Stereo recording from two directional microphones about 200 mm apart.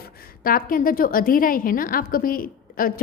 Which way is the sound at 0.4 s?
45° left (ahead or behind).